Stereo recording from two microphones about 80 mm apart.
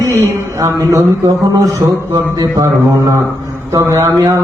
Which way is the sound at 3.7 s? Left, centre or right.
Right.